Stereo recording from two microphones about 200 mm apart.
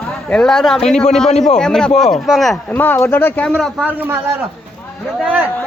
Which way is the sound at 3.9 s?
10° right (ahead or behind).